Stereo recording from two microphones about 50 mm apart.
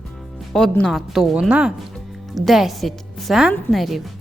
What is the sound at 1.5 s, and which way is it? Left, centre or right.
Speech, right.